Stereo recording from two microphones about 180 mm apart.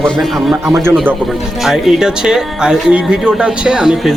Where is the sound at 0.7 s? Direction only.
15° right (ahead or behind).